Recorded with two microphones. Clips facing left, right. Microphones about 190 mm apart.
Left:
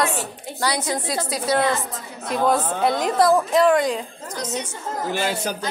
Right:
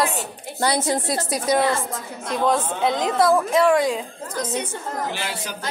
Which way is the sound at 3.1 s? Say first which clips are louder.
Left 1 dB; centre (ahead or behind).